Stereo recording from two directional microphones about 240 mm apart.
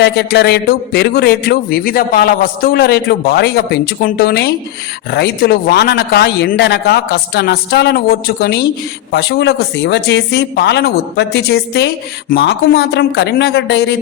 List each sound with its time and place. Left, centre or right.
0.0 s a man's voice: left